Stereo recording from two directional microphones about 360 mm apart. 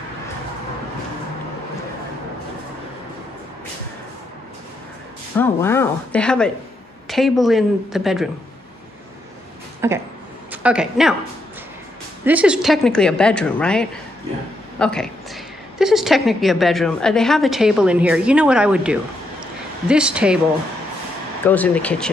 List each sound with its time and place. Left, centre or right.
5.4 s a woman's voice: centre
9.8 s speech: centre
12.3 s a woman's voice: centre
21.5 s a woman's voice: centre